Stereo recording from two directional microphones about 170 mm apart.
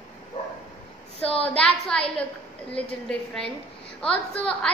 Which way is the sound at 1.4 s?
5° left (ahead or behind).